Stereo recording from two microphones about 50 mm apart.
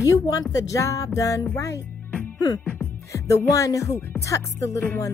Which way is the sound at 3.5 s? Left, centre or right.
Left.